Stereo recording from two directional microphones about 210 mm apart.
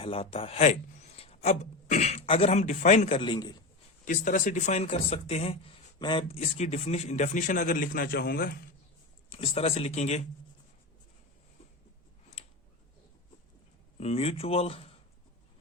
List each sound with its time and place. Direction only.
0.0 s speech: 25° left (ahead or behind)
4.0 s speech: 40° left (ahead or behind)
9.3 s speech: 25° left (ahead or behind)
14.0 s speech: 30° left (ahead or behind)